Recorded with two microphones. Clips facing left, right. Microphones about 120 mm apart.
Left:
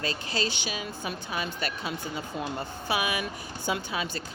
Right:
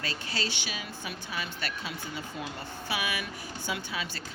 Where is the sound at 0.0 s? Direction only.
20° left (ahead or behind).